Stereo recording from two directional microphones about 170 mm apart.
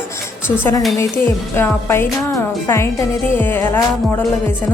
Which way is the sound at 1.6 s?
15° left (ahead or behind).